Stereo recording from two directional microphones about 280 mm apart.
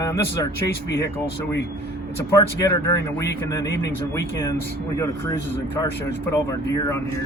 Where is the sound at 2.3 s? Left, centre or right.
Centre.